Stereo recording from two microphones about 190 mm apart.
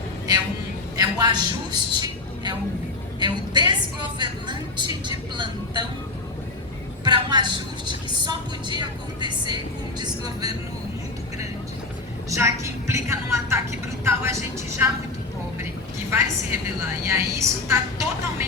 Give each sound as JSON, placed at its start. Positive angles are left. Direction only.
{"t": 0.9, "sound": "a man's voice", "side_deg": -20}
{"t": 3.2, "sound": "a woman's voice", "side_deg": -25}
{"t": 7.0, "sound": "a woman's voice", "side_deg": -25}
{"t": 12.3, "sound": "a woman's voice", "side_deg": -15}
{"t": 16.0, "sound": "a woman's voice", "side_deg": -10}